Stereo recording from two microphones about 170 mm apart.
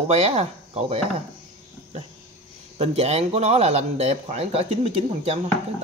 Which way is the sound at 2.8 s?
35° right (ahead or behind).